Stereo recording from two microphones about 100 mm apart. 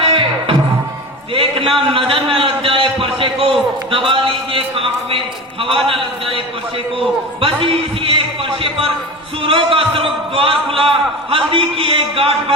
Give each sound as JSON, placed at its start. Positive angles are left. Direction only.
{"t": 0.0, "sound": "music", "side_deg": -65}
{"t": 1.3, "sound": "a man's voice", "side_deg": -65}
{"t": 7.4, "sound": "a man's voice", "side_deg": -65}